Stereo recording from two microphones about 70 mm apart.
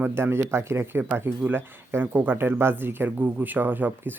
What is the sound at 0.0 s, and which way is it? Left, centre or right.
Speech, right.